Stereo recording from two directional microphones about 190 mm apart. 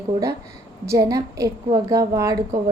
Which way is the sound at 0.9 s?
15° right (ahead or behind).